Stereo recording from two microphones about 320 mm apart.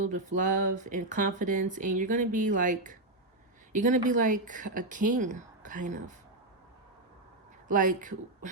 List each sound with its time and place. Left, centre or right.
0.0 s speech: right
7.7 s speech: right